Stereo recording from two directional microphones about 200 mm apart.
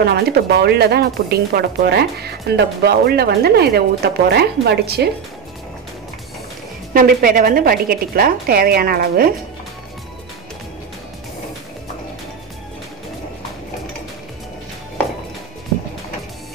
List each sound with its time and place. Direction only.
0.0 s speech: 50° right (ahead or behind)
6.9 s speech: 45° right (ahead or behind)